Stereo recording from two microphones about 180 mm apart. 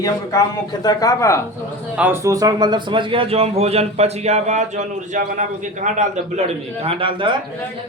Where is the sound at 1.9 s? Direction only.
10° right (ahead or behind).